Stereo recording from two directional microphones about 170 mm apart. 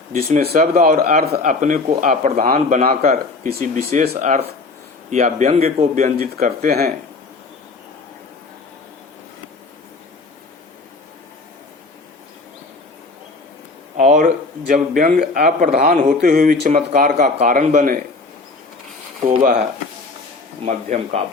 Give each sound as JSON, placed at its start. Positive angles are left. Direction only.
{"t": 0.6, "sound": "speech", "side_deg": -55}
{"t": 4.2, "sound": "speech", "side_deg": -45}
{"t": 13.9, "sound": "a sound", "side_deg": -45}
{"t": 14.7, "sound": "a man's voice", "side_deg": -55}
{"t": 20.7, "sound": "speech", "side_deg": -40}